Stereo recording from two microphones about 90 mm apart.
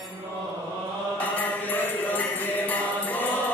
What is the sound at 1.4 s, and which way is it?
Music, 20° left (ahead or behind).